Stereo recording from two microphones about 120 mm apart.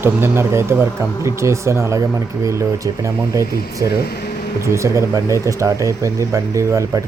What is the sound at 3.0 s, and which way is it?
Speech, 25° right (ahead or behind).